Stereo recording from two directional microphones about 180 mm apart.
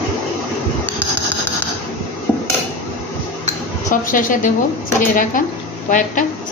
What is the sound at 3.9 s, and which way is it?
A woman's voice, 50° left (ahead or behind).